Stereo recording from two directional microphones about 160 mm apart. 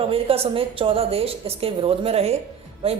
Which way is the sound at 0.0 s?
35° right (ahead or behind).